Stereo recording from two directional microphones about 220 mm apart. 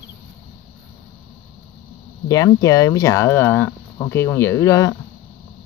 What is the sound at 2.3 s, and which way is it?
Speech, 15° left (ahead or behind).